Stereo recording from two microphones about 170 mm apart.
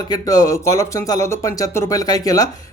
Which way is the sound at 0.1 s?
20° left (ahead or behind).